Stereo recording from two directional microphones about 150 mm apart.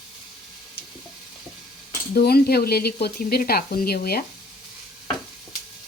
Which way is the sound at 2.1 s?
90° left.